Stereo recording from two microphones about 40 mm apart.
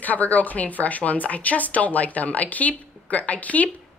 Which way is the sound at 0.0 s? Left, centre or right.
Left.